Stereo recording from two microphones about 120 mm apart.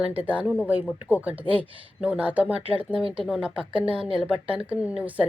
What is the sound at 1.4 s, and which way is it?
Speech, 50° right (ahead or behind).